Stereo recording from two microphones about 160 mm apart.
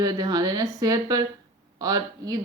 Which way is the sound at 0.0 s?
25° right (ahead or behind).